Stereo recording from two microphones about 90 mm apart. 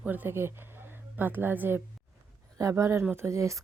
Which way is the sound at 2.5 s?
35° right (ahead or behind).